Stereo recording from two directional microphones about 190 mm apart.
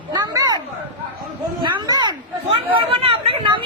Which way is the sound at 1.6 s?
20° right (ahead or behind).